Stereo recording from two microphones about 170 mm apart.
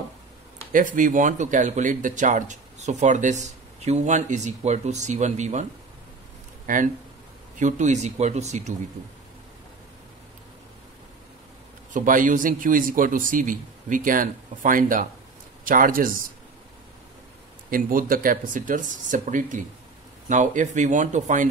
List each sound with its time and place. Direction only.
0.7 s speech: 50° right (ahead or behind)
11.9 s speech: 50° right (ahead or behind)
17.6 s speech: 55° right (ahead or behind)